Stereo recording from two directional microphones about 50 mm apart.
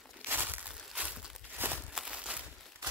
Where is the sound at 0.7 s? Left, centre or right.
Right.